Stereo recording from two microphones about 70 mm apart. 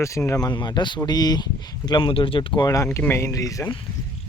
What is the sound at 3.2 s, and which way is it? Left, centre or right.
Speech, left.